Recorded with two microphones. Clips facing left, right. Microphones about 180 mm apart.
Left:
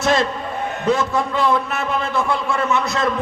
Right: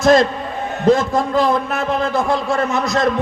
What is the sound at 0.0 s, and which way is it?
A man's voice, 40° right (ahead or behind).